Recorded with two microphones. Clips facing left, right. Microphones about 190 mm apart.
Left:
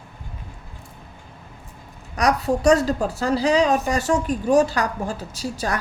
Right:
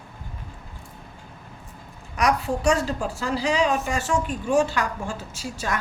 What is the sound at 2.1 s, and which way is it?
A woman's voice, 35° left (ahead or behind).